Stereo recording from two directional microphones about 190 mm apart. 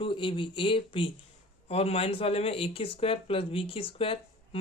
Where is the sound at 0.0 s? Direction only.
25° left (ahead or behind).